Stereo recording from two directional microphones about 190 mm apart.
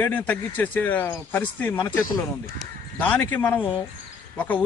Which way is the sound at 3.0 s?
10° left (ahead or behind).